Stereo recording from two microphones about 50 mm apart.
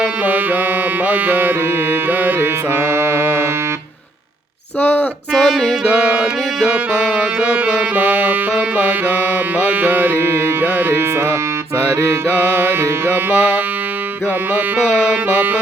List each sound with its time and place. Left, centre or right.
0.3 s music: right
2.4 s music: right
4.8 s a sound: left
5.3 s music: centre
5.8 s music: right
7.9 s music: right
10.2 s music: right
12.3 s music: right